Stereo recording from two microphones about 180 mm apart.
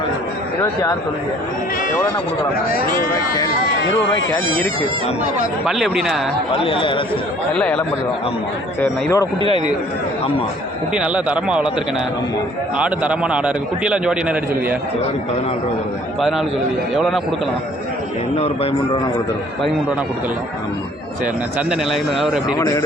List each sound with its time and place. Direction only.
0.6 s speech: 15° left (ahead or behind)
2.7 s speech: 50° left (ahead or behind)
3.1 s speech: 20° left (ahead or behind)
5.6 s a man's voice: centre (ahead or behind)
6.6 s speech: 30° left (ahead or behind)
7.5 s a man's voice: 5° left (ahead or behind)
8.8 s speech: 15° left (ahead or behind)
10.9 s a man's voice: 5° right (ahead or behind)
12.7 s a man's voice: 5° right (ahead or behind)
18.3 s speech: 35° left (ahead or behind)
21.7 s a man's voice: centre (ahead or behind)
22.4 s speech: 20° left (ahead or behind)